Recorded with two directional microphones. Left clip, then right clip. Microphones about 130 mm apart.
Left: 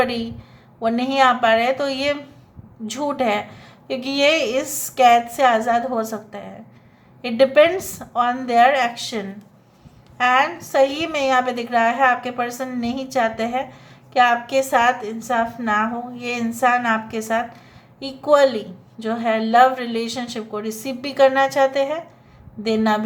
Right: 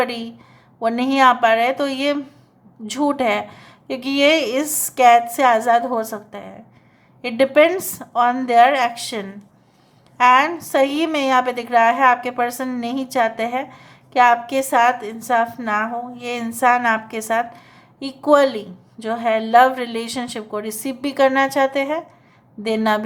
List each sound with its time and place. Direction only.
0.0 s a woman's voice: 30° right (ahead or behind)